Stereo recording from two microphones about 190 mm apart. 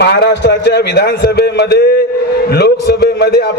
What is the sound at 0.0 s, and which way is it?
A man's voice, 60° left (ahead or behind).